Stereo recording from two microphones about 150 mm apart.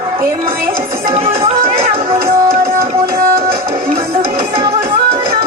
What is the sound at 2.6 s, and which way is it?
Music, 20° right (ahead or behind).